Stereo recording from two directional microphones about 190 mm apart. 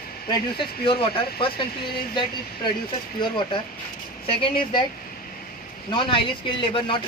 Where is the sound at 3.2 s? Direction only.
25° left (ahead or behind).